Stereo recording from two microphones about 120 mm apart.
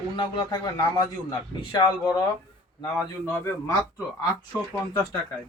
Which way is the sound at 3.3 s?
20° left (ahead or behind).